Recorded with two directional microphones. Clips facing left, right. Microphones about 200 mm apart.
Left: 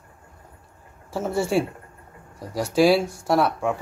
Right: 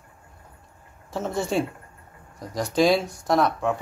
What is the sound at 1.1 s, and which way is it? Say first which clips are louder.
Speech: left 3 dB; 10° left (ahead or behind).